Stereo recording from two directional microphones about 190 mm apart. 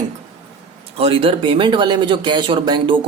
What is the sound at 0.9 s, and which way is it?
Speech, 30° right (ahead or behind).